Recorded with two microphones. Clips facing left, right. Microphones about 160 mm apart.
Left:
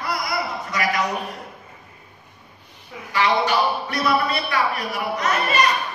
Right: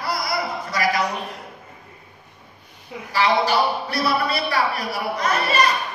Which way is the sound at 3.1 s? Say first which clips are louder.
Right 1 dB; 35° right (ahead or behind).